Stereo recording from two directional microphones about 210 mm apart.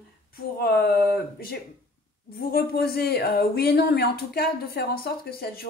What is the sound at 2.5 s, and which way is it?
Speech, 50° left (ahead or behind).